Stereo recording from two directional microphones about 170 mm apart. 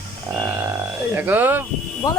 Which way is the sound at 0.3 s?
5° right (ahead or behind).